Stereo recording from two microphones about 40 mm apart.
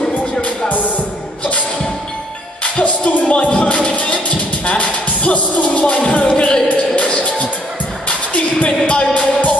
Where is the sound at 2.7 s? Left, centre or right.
Left.